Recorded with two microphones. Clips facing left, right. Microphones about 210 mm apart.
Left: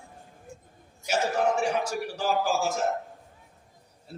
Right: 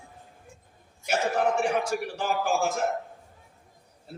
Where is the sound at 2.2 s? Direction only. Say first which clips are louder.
Left 2 dB; 55° right (ahead or behind).